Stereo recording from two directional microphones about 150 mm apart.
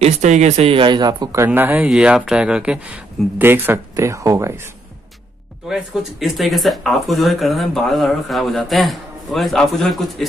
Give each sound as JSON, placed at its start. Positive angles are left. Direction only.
{"t": 0.0, "sound": "speech", "side_deg": -50}
{"t": 5.7, "sound": "speech", "side_deg": 0}